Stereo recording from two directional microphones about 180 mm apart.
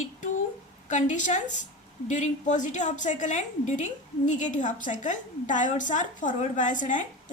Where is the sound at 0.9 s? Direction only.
45° left (ahead or behind).